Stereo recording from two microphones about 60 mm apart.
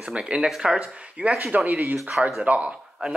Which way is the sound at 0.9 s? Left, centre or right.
Centre.